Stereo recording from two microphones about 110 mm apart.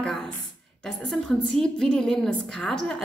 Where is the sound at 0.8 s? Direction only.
5° left (ahead or behind).